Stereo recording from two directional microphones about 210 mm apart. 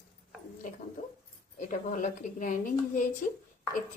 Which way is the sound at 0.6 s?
40° left (ahead or behind).